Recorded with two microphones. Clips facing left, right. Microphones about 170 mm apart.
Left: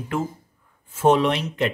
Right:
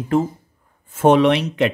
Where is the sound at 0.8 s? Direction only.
60° right (ahead or behind); by 1.7 s 75° right (ahead or behind).